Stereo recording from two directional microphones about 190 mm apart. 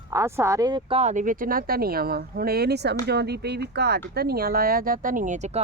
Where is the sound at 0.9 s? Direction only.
35° right (ahead or behind).